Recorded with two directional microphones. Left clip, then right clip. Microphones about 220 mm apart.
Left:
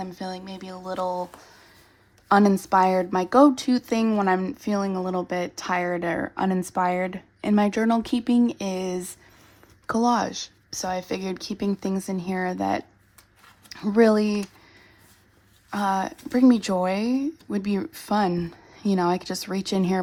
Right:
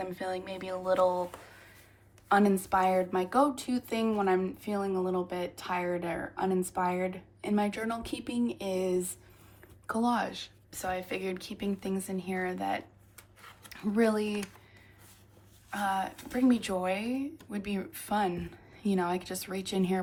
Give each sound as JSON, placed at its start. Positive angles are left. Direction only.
{"t": 0.0, "sound": "speech", "side_deg": 15}
{"t": 2.3, "sound": "a woman's voice", "side_deg": 30}
{"t": 13.9, "sound": "a woman's voice", "side_deg": 30}
{"t": 15.7, "sound": "a woman's voice", "side_deg": 25}